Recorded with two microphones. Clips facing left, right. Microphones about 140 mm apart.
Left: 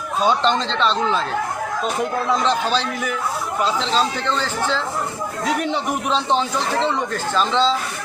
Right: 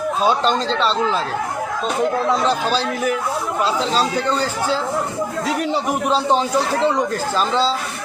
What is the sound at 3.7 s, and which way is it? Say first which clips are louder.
Speech: right 2 dB; 40° right (ahead or behind).